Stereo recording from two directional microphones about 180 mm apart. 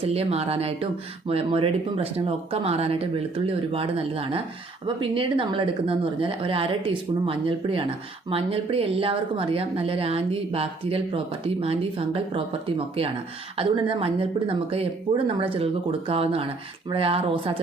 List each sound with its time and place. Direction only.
0.0 s speech: 35° right (ahead or behind)